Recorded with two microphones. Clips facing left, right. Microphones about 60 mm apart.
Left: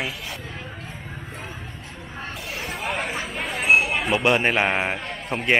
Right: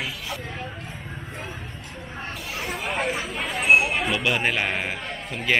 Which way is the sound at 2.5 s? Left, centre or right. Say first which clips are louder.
Even; centre.